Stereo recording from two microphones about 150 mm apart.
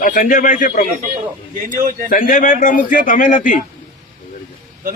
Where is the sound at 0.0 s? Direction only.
60° left (ahead or behind).